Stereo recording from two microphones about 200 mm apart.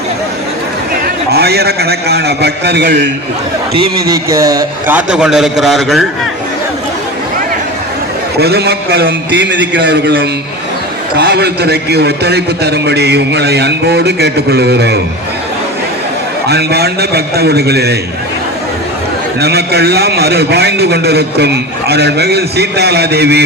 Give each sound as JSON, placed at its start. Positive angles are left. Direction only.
{"t": 1.0, "sound": "a man's voice", "side_deg": -50}
{"t": 3.8, "sound": "a man's voice", "side_deg": -20}
{"t": 8.4, "sound": "a man's voice", "side_deg": -55}
{"t": 16.5, "sound": "a man's voice", "side_deg": -55}
{"t": 19.4, "sound": "a man's voice", "side_deg": -55}